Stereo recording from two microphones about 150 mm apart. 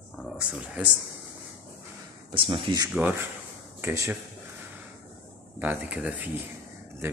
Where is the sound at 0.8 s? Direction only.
10° right (ahead or behind).